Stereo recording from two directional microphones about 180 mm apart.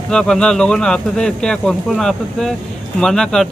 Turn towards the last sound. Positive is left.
turn(degrees=5)  # may be behind; listen again after turning